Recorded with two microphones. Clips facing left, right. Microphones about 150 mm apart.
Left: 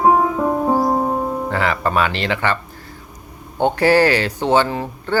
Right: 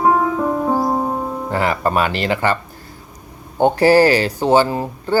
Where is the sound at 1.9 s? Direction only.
40° right (ahead or behind).